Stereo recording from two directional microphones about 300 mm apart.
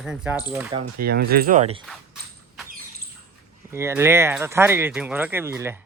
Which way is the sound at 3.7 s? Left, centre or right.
Centre.